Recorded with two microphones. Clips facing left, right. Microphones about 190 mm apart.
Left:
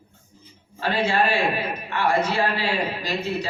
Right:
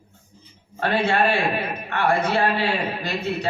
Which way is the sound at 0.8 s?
60° right (ahead or behind).